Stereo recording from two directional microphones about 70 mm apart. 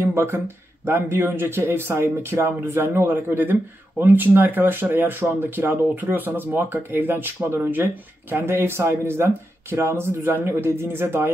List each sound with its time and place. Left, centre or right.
0.0 s speech: right